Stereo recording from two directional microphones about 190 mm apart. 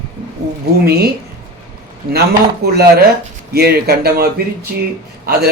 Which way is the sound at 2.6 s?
60° right (ahead or behind).